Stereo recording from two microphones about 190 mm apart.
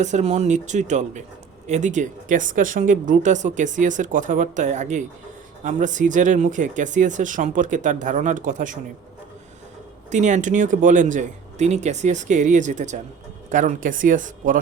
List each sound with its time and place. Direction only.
0.0 s speech: 35° right (ahead or behind)
10.1 s speech: 40° right (ahead or behind)